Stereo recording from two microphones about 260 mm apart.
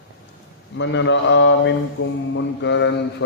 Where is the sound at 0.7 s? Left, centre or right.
Left.